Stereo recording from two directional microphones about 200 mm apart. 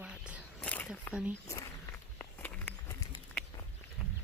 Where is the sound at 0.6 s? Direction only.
10° left (ahead or behind).